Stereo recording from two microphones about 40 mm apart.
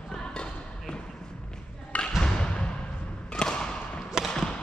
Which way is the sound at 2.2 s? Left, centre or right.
Left.